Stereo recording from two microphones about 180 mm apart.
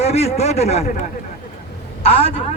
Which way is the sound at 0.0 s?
35° left (ahead or behind).